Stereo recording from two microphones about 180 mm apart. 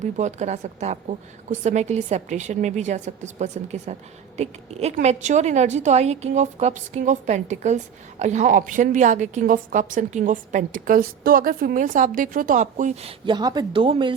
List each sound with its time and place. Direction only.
0.0 s a woman's voice: 40° right (ahead or behind)